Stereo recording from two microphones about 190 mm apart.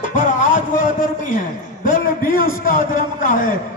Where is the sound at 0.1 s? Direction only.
45° left (ahead or behind).